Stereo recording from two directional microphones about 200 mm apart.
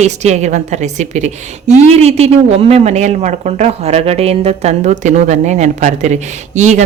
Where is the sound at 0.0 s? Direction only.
35° right (ahead or behind).